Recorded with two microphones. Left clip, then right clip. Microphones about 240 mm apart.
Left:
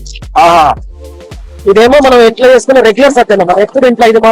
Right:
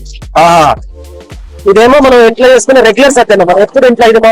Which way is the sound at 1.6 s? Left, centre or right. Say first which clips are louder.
Right 1 dB; right.